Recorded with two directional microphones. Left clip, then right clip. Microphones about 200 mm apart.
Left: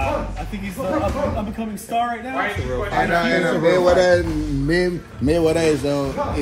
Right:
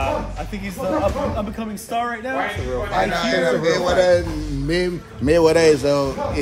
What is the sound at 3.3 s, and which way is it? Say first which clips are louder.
Speech: left 1 dB; 35° left (ahead or behind).